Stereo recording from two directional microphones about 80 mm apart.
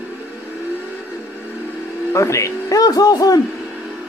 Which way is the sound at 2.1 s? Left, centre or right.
Left.